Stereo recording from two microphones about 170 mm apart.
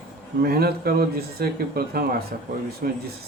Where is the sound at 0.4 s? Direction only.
65° right (ahead or behind).